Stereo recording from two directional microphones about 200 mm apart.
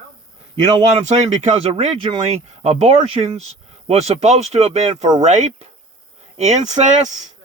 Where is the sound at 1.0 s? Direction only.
35° right (ahead or behind).